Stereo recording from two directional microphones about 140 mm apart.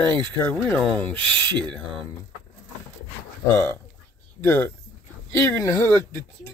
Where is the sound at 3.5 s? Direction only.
15° left (ahead or behind).